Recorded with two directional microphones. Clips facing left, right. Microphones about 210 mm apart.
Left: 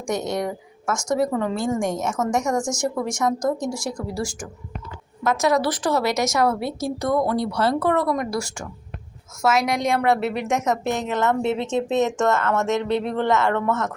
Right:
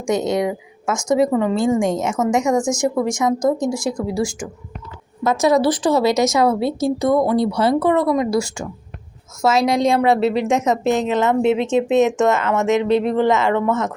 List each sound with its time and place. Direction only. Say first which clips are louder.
0.1 s speech: right 6 dB; 20° right (ahead or behind)
11.9 s speech: right 6 dB; 90° right
12.3 s speech: right 3 dB; 15° right (ahead or behind)
12.6 s speech: right 6 dB; 90° right
13.1 s speech: right 4 dB; 15° right (ahead or behind)